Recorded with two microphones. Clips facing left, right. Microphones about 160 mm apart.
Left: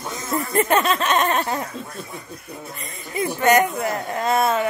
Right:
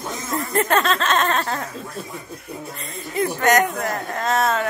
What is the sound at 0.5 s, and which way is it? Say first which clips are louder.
Speech: left 1 dB; 10° left (ahead or behind).